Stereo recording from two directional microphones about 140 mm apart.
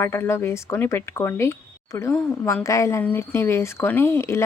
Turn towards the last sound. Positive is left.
turn(degrees=20)  # may be behind; listen again after turning